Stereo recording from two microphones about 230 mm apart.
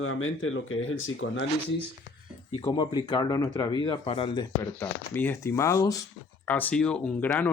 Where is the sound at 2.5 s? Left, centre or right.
Left.